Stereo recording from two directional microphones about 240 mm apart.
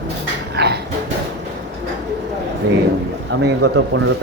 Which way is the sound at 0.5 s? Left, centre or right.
Right.